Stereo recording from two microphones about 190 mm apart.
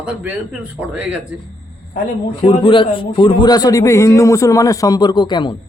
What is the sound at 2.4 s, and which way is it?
A man's voice, 25° left (ahead or behind).